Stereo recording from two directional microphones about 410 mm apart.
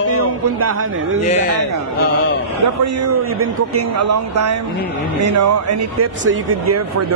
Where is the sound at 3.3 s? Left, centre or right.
Right.